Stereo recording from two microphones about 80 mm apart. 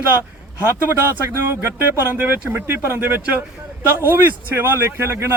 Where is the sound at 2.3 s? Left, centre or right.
Right.